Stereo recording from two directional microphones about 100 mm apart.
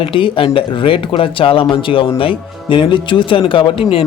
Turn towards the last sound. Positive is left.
turn(degrees=60)  # may be behind; listen again after turning